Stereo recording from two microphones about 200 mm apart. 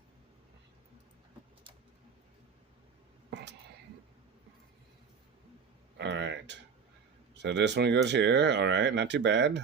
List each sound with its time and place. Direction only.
3.2 s whispering: 60° right (ahead or behind)
6.0 s a sound: 65° right (ahead or behind)
7.3 s speech: 60° right (ahead or behind)